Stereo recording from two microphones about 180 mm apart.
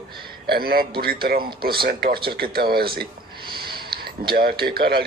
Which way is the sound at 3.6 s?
60° right (ahead or behind).